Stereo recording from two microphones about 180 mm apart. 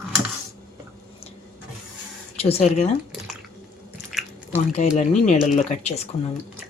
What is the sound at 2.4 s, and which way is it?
Speech, 35° left (ahead or behind).